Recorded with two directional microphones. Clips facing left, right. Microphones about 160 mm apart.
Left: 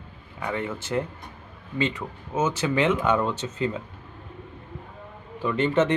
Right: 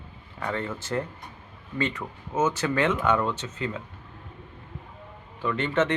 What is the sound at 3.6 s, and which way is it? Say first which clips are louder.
Speech: left 4 dB; 25° left (ahead or behind).